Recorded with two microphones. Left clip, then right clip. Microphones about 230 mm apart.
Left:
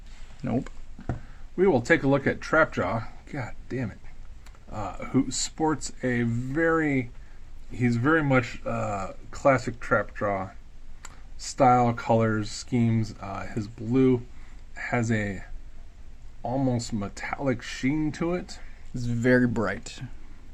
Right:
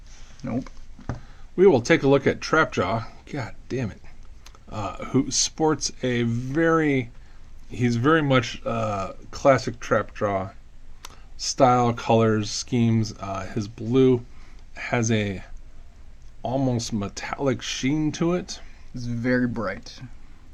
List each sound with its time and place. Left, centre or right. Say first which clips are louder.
0.4 s speech: left 1 dB; left
1.5 s speech: right 4 dB; right
4.8 s speech: right 2 dB; right
19.0 s speech: left 2 dB; left